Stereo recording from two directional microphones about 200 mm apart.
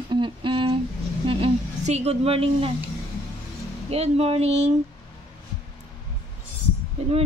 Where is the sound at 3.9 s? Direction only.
30° right (ahead or behind).